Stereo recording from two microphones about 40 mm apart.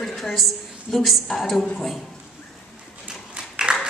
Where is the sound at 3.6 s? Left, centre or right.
Centre.